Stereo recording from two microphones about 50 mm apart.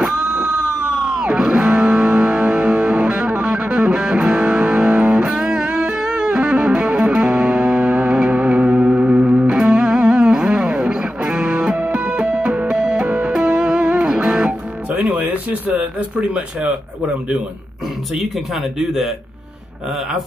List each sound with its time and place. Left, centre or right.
0.0 s music: centre
14.9 s a sound: right
16.2 s speech: right
18.1 s speech: centre